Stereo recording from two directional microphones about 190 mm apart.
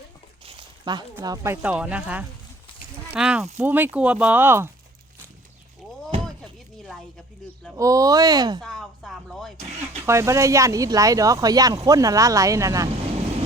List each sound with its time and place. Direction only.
0.4 s a sound: 20° right (ahead or behind)
1.1 s speech: 15° right (ahead or behind)
1.6 s speech: 5° right (ahead or behind)
6.2 s door: 5° left (ahead or behind)
7.8 s speech: 15° right (ahead or behind)
8.6 s speech: centre (ahead or behind)
10.1 s speech: 15° right (ahead or behind)